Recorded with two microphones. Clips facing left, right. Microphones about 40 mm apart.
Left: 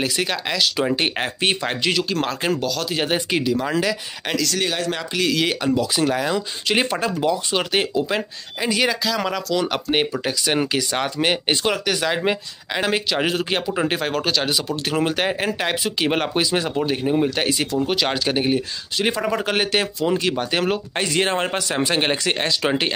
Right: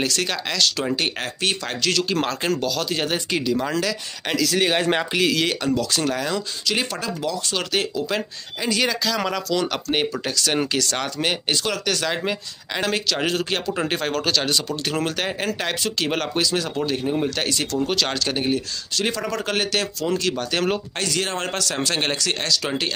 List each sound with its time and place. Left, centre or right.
0.0 s speech: centre
2.0 s speech: centre
3.0 s speech: centre
4.3 s speech: centre
4.7 s speech: right
5.1 s speech: centre
5.4 s speech: centre
6.7 s speech: left